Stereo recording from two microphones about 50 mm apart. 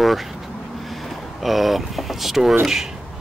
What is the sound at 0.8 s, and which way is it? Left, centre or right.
Vehicle, centre.